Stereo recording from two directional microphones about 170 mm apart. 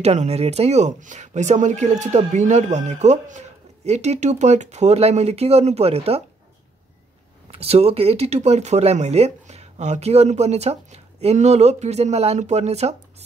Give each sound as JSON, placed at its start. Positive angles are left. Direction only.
{"t": 0.0, "sound": "speech", "side_deg": -40}
{"t": 7.5, "sound": "speech", "side_deg": -35}